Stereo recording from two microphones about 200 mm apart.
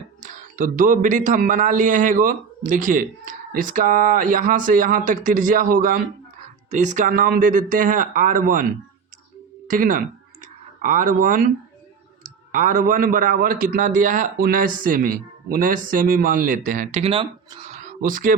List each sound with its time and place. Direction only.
0.2 s a man's voice: 40° right (ahead or behind)
9.6 s a man's voice: 45° right (ahead or behind)